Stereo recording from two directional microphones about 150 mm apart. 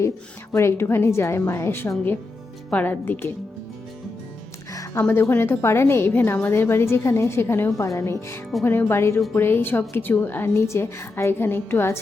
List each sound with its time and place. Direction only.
0.5 s a woman's voice: 15° left (ahead or behind)
4.7 s music: 20° left (ahead or behind)
5.0 s a woman's voice: 15° left (ahead or behind)